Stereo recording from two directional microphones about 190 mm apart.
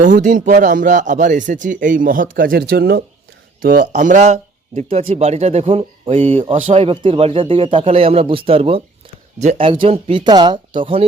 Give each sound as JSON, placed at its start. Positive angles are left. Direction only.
{"t": 0.0, "sound": "speech", "side_deg": -40}